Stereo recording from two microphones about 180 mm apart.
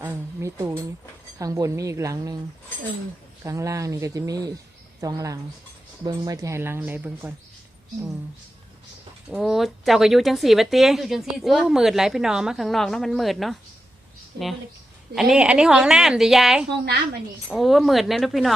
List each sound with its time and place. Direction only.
0.0 s a sound: 10° right (ahead or behind)
1.4 s speech: 20° right (ahead or behind)
3.4 s speech: 15° right (ahead or behind)
9.3 s speech: centre (ahead or behind)
15.1 s speech: centre (ahead or behind)